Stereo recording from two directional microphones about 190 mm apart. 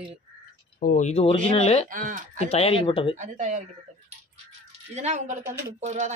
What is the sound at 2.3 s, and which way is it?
Speech, 35° left (ahead or behind).